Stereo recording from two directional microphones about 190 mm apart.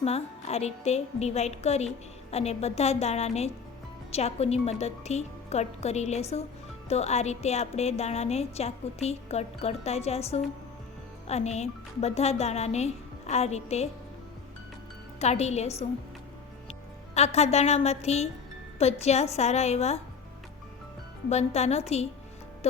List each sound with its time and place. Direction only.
0.0 s a woman's voice: 35° left (ahead or behind)
15.2 s a woman's voice: 35° left (ahead or behind)
17.2 s a woman's voice: 35° left (ahead or behind)
21.2 s a woman's voice: 35° left (ahead or behind)